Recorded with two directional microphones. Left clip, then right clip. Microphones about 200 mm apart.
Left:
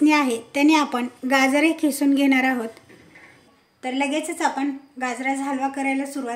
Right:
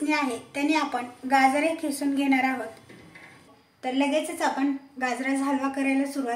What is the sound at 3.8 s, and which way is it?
Speech, 25° left (ahead or behind).